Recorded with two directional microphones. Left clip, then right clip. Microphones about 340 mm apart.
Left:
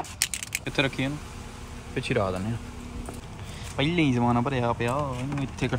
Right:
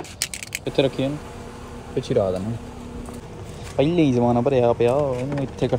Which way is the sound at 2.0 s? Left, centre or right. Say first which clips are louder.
Right 6 dB; centre.